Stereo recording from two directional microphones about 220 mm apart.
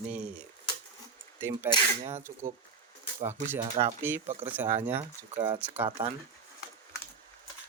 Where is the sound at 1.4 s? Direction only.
10° right (ahead or behind).